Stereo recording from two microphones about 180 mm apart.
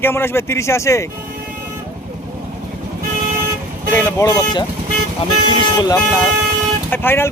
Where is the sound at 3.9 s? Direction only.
15° left (ahead or behind).